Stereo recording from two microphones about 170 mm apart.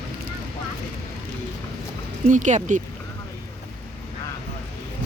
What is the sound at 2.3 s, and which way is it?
Speech, 45° right (ahead or behind).